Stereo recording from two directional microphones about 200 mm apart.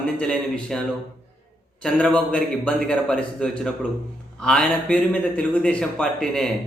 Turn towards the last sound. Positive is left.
turn(degrees=0)  # may be behind; listen again after turning